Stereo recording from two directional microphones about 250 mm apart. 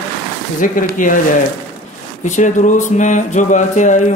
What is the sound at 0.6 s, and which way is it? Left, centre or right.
Speech, left.